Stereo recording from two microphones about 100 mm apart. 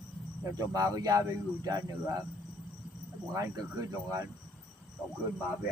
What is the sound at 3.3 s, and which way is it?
Speech, 35° right (ahead or behind).